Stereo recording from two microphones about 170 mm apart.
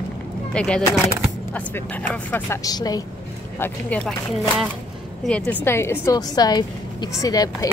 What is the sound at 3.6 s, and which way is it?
Speech, 5° left (ahead or behind).